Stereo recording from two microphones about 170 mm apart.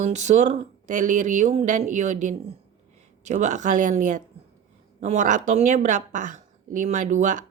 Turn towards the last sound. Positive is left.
turn(degrees=-45)  # may be behind; listen again after turning